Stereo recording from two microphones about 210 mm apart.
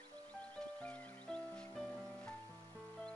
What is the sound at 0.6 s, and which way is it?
Music, 5° left (ahead or behind).